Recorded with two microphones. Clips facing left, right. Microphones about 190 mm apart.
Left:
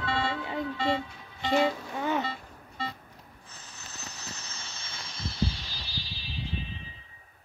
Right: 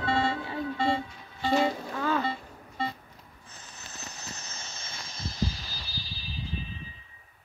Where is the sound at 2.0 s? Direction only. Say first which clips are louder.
Right 1 dB; 20° left (ahead or behind).